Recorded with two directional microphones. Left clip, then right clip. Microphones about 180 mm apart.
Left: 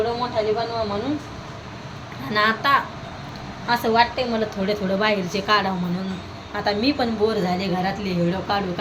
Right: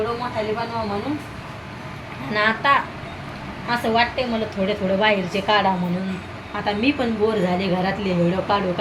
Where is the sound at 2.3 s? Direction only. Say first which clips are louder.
Right 1 dB; 10° left (ahead or behind).